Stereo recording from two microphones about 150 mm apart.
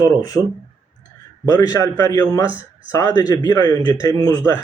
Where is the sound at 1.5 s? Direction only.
25° left (ahead or behind).